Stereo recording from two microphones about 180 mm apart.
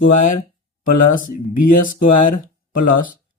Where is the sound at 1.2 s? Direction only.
50° left (ahead or behind).